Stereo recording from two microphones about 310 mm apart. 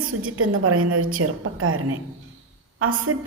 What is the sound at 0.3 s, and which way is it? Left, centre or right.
A woman's voice, right.